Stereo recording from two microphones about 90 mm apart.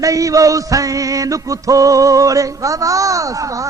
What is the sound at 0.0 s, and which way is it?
Music, 40° right (ahead or behind).